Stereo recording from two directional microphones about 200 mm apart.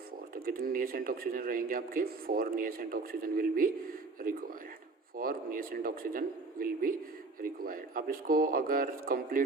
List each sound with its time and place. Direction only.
0.4 s a man's voice: 45° right (ahead or behind)